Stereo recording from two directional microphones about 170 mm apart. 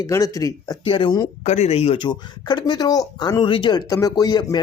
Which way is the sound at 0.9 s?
30° left (ahead or behind).